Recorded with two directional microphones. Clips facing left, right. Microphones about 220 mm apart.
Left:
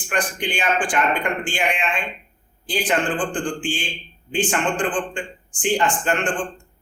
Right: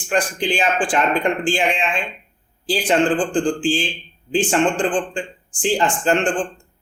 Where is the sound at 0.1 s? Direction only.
30° right (ahead or behind).